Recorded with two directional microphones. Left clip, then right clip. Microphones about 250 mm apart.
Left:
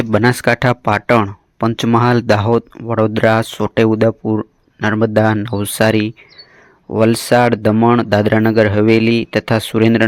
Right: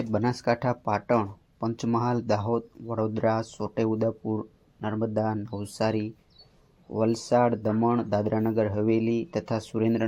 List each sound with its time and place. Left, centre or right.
0.1 s speech: left